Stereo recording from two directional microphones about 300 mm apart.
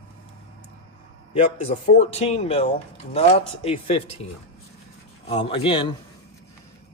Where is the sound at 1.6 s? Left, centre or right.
Centre.